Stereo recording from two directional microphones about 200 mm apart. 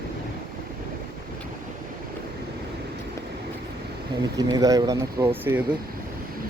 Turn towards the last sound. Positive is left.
turn(degrees=-10)  # may be behind; listen again after turning